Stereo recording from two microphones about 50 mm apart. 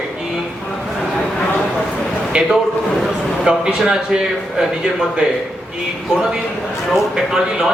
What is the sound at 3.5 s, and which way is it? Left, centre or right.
Speech, centre.